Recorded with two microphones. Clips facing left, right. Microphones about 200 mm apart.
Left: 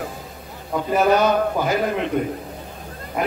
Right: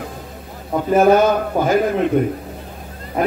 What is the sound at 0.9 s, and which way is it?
Speech, 45° right (ahead or behind).